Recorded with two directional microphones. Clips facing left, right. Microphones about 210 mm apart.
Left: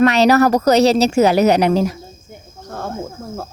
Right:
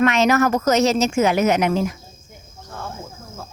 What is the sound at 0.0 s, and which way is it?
A woman's voice, 35° left (ahead or behind).